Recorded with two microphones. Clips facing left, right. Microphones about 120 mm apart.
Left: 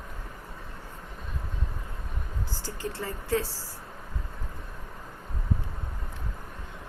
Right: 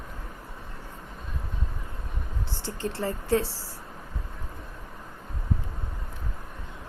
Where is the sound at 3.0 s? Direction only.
20° right (ahead or behind).